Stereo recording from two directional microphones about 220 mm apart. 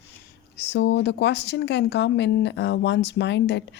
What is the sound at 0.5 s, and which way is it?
A woman's voice, 50° left (ahead or behind).